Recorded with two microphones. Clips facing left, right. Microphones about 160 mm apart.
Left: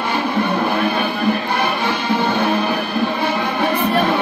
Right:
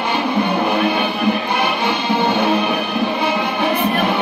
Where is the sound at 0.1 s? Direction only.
20° right (ahead or behind).